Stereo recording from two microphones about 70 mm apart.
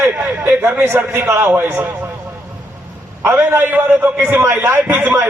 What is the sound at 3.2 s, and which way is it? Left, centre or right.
Speech, right.